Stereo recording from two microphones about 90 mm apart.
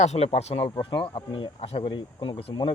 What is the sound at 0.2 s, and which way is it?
Speech, 90° left.